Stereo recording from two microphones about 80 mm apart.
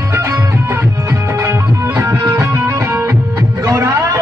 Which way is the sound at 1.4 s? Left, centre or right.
Right.